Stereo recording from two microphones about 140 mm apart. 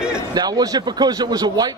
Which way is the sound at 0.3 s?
30° right (ahead or behind).